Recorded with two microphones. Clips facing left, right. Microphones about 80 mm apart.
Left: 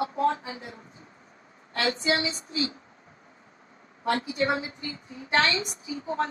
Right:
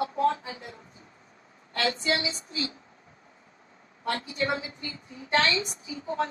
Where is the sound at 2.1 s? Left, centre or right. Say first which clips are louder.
Left 2 dB; left.